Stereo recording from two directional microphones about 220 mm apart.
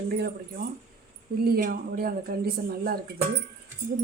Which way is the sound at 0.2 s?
45° right (ahead or behind).